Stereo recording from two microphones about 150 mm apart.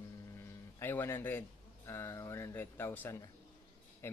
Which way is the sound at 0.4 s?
15° left (ahead or behind).